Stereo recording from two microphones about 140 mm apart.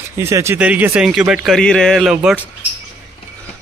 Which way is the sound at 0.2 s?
20° right (ahead or behind).